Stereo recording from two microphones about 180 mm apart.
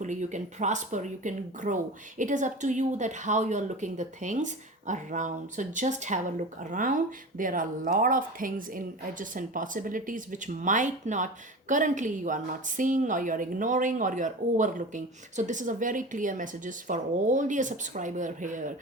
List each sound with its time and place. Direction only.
0.0 s a woman's voice: 45° right (ahead or behind)